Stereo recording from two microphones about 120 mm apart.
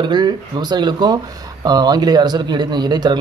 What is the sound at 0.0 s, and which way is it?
Speech, 40° right (ahead or behind).